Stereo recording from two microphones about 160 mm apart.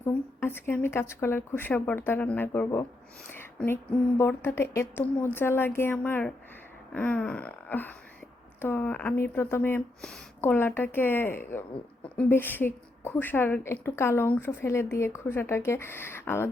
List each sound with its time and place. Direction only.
0.0 s a woman's voice: 15° left (ahead or behind)
3.3 s a sound: 15° left (ahead or behind)
4.2 s a woman's voice: 15° left (ahead or behind)